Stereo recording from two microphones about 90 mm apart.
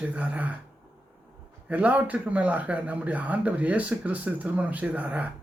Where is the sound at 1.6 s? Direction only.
15° right (ahead or behind).